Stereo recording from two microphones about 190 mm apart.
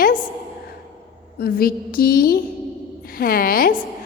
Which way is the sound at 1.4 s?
50° left (ahead or behind).